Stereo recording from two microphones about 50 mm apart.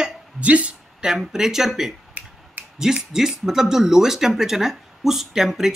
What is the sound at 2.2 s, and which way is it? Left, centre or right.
Finger snapping, right.